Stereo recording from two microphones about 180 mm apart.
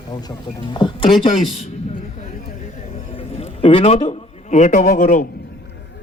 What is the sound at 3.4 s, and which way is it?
A man's voice, 30° left (ahead or behind).